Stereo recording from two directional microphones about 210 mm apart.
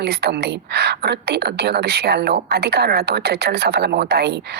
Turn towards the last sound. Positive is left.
turn(degrees=-50)  # may be behind; listen again after turning